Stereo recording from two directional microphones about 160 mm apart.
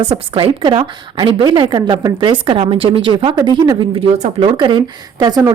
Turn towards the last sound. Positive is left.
turn(degrees=-25)  # may be behind; listen again after turning